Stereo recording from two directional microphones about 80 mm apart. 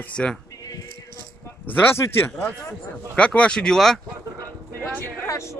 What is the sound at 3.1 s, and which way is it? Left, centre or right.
Speech, centre.